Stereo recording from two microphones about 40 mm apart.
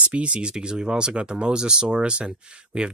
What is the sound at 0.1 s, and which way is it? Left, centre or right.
Speech, right.